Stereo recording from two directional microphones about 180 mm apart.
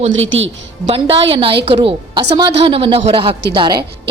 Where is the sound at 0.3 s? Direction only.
90° right.